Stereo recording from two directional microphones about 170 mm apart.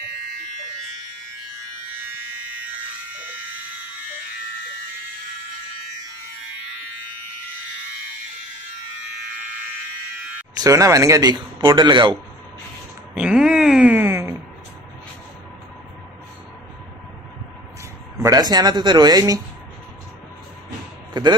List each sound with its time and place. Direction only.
10.6 s a man's voice: 20° right (ahead or behind)
13.1 s wail: 5° right (ahead or behind)
18.2 s a man's voice: 25° right (ahead or behind)
21.1 s a sound: 25° right (ahead or behind)